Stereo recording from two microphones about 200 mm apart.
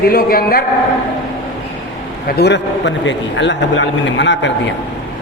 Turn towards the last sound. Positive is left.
turn(degrees=65)  # may be behind; listen again after turning